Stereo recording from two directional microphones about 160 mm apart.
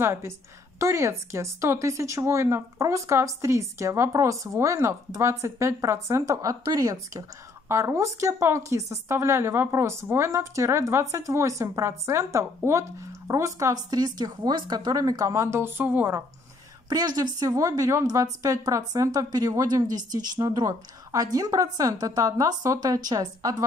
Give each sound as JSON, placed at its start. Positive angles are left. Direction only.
{"t": 0.0, "sound": "a woman's voice", "side_deg": -15}
{"t": 16.9, "sound": "a woman's voice", "side_deg": -25}